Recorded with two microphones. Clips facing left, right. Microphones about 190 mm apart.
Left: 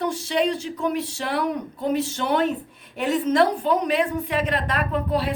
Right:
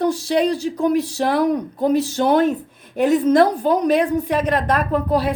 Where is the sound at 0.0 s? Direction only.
40° right (ahead or behind).